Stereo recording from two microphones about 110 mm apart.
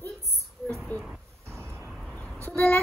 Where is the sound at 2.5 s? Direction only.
15° left (ahead or behind).